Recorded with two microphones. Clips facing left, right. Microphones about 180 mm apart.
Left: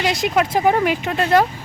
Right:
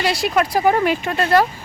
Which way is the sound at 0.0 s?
20° left (ahead or behind).